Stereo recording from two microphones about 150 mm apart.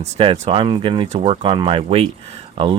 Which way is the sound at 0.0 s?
40° right (ahead or behind).